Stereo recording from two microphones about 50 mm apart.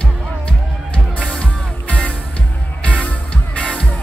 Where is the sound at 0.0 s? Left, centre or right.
Left.